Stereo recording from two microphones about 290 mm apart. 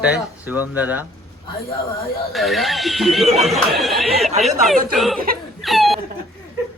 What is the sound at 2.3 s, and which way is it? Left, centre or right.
Speech, centre.